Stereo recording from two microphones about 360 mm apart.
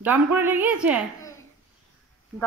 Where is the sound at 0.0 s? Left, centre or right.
Centre.